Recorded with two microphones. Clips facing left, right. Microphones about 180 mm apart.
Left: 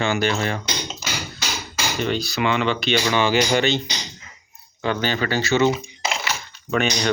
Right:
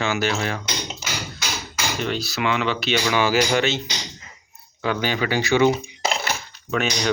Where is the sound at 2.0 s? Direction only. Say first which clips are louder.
Left 3 dB; centre (ahead or behind).